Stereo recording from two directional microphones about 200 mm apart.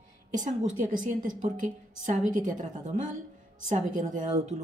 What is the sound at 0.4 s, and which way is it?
A woman's voice, 40° right (ahead or behind).